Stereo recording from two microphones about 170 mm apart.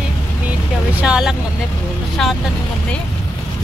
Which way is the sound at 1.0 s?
5° right (ahead or behind).